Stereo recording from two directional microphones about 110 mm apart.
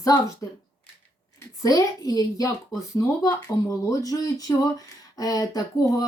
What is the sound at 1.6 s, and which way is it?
Speech, 35° left (ahead or behind).